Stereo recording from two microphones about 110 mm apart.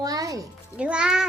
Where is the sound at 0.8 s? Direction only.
10° right (ahead or behind).